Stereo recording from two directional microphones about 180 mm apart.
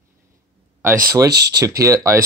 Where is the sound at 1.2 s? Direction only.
65° right (ahead or behind).